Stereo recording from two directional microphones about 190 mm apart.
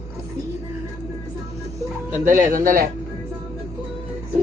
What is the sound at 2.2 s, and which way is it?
Speech, 45° right (ahead or behind).